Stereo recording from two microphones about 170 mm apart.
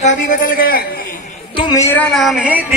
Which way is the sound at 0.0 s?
55° left (ahead or behind).